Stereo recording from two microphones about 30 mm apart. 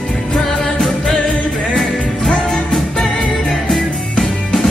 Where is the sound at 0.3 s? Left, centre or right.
Left.